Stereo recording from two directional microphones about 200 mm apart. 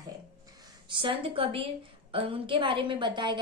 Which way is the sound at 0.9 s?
25° right (ahead or behind).